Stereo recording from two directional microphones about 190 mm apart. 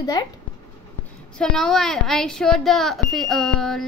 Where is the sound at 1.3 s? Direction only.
5° left (ahead or behind).